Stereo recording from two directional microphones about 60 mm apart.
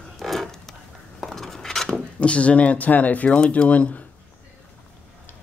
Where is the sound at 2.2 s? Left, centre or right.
Centre.